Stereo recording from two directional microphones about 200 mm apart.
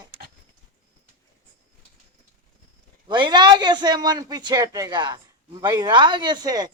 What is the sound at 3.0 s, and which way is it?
Speech, 25° right (ahead or behind).